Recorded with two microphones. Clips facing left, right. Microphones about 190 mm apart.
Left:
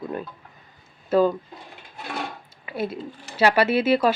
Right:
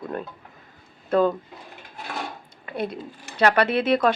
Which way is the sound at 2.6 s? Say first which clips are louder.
Left 1 dB; 5° left (ahead or behind).